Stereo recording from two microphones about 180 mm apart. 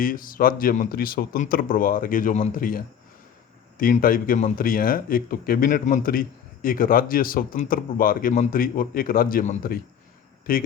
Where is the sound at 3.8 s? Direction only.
50° left (ahead or behind).